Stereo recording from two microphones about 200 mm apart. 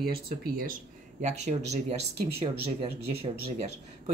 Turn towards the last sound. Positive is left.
turn(degrees=-30)  # may be behind; listen again after turning